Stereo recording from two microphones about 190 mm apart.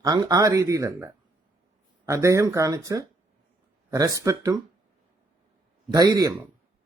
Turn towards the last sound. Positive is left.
turn(degrees=-20)  # may be behind; listen again after turning